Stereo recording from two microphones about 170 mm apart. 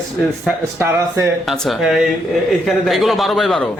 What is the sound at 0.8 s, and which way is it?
Speech, 20° right (ahead or behind).